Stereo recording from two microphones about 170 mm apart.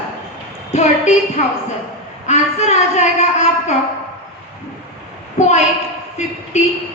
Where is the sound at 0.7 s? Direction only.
40° left (ahead or behind).